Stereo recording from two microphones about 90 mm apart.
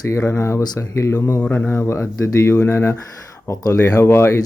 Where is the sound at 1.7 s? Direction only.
30° left (ahead or behind).